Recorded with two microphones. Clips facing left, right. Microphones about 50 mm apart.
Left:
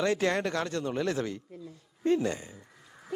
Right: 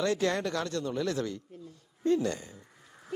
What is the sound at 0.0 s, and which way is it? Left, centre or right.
Speech, left.